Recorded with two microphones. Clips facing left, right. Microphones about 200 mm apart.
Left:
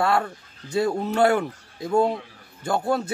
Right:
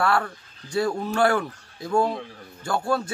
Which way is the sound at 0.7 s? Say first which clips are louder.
Left 2 dB; 20° left (ahead or behind).